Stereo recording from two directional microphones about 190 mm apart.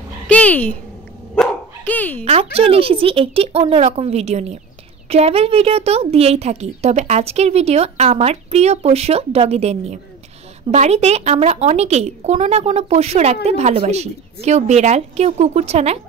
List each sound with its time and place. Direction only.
0.3 s speech: 5° left (ahead or behind)
1.3 s dog: 5° left (ahead or behind)
2.2 s a woman's voice: 30° right (ahead or behind)